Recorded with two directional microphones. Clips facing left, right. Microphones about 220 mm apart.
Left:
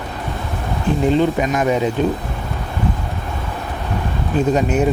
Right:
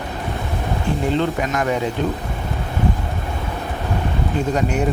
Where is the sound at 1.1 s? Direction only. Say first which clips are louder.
Left 5 dB; 15° left (ahead or behind).